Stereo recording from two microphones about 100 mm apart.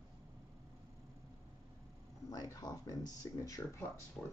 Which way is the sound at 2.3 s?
35° left (ahead or behind).